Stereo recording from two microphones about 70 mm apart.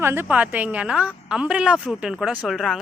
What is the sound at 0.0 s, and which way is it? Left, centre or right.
Speech, right.